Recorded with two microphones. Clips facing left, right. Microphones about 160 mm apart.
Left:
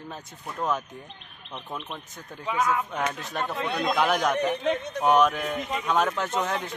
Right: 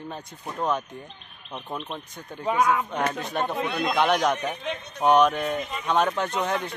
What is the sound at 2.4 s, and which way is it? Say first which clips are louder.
Speech: right 4 dB; 55° right (ahead or behind).